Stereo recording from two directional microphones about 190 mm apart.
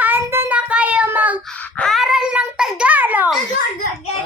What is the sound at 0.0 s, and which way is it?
Child singing, 10° right (ahead or behind).